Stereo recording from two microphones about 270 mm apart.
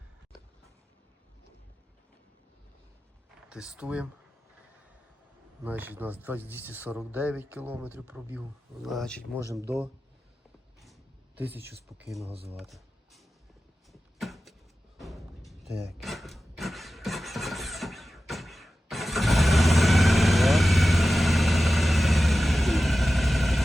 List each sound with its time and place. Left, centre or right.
3.5 s speech: centre
5.6 s speech: centre
9.4 s speech: centre
11.3 s speech: centre
12.3 s speech: right
12.5 s music: centre
13.9 s a sound: centre